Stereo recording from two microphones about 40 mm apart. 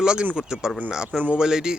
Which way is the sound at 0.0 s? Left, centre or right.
Right.